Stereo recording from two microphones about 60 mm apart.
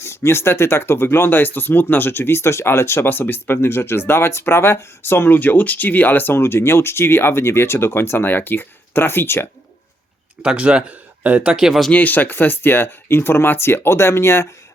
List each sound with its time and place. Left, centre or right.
0.0 s speech: left
10.4 s speech: centre
11.4 s speech: centre
11.9 s speech: left